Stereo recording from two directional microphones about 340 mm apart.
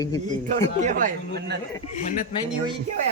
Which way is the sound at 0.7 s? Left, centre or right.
Right.